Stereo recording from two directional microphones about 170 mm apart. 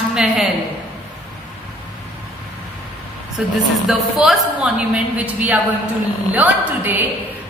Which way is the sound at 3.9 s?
Centre (ahead or behind).